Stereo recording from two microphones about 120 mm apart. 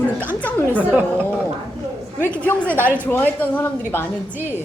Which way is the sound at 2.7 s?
15° right (ahead or behind).